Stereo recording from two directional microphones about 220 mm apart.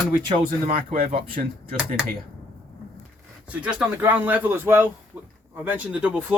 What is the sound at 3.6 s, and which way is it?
Speech, 5° right (ahead or behind).